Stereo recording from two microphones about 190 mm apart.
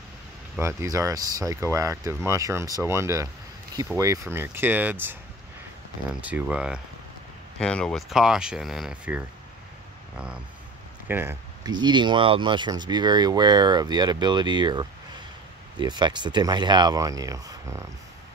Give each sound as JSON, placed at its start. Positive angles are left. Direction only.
{"t": 0.6, "sound": "speech", "side_deg": -15}
{"t": 6.2, "sound": "speech", "side_deg": -5}